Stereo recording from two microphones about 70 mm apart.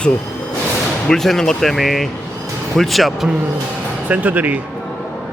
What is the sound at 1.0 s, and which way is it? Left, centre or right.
Speech, centre.